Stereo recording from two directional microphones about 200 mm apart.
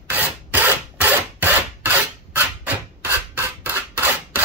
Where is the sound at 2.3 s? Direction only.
10° right (ahead or behind).